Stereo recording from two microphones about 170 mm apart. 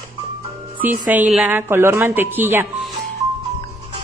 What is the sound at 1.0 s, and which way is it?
Speech, 5° right (ahead or behind).